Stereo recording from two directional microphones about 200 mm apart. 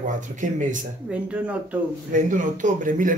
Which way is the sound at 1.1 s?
5° right (ahead or behind).